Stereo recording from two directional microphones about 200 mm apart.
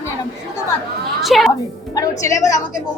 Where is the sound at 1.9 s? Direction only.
15° left (ahead or behind).